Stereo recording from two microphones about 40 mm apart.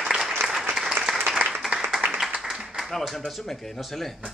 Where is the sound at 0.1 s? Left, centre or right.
Centre.